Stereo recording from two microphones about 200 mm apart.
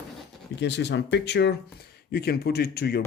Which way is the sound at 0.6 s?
60° left (ahead or behind).